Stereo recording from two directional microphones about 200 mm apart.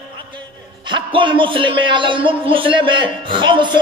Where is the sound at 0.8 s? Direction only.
25° right (ahead or behind).